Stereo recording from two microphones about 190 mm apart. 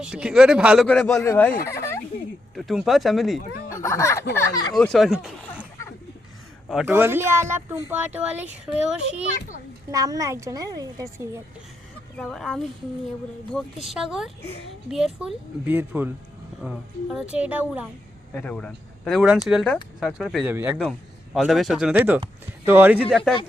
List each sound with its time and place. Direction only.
0.0 s speech: 5° right (ahead or behind); by 2.0 s 15° left (ahead or behind)
2.6 s speech: centre (ahead or behind)
3.4 s a sound: 50° left (ahead or behind)
3.8 s speech: 15° left (ahead or behind)
4.7 s speech: centre (ahead or behind)
6.7 s a woman's voice: 5° right (ahead or behind)
9.9 s a woman's voice: 20° right (ahead or behind)
12.1 s speech: centre (ahead or behind)
13.8 s a woman's voice: centre (ahead or behind)
18.3 s a woman's voice: 5° left (ahead or behind)
23.0 s speech: 5° left (ahead or behind)